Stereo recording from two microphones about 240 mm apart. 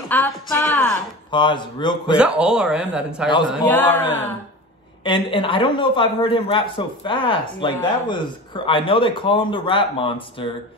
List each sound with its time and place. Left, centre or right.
0.1 s speech: centre
1.3 s a man's voice: centre
2.1 s a man's voice: centre
3.7 s speech: centre
5.0 s a man's voice: left